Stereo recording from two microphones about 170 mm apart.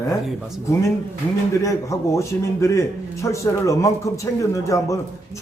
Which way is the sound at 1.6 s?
15° left (ahead or behind).